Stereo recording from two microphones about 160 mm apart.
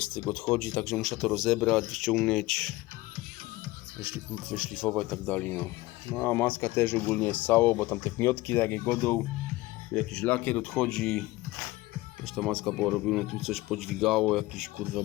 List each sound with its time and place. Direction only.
0.0 s speech: 10° left (ahead or behind)
4.4 s speech: 5° right (ahead or behind)
12.2 s speech: centre (ahead or behind)